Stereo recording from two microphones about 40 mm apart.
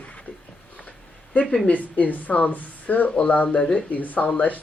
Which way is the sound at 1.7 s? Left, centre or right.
Left.